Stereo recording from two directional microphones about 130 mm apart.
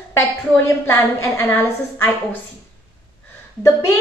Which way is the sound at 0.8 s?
15° left (ahead or behind).